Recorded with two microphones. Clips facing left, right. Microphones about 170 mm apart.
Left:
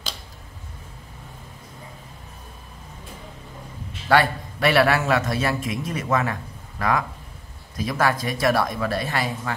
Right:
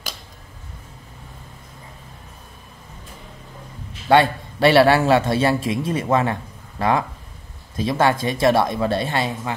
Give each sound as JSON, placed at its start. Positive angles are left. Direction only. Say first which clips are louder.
{"t": 4.1, "sound": "a man's voice", "louder": "right 4 dB", "side_deg": -25}